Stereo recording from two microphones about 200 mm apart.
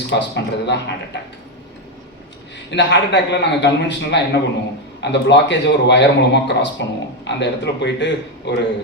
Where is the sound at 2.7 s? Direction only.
60° left (ahead or behind).